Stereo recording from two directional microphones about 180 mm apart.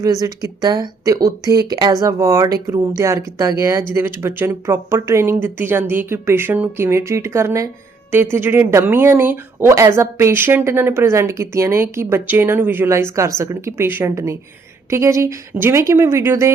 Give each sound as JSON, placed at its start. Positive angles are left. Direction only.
{"t": 0.0, "sound": "speech", "side_deg": -20}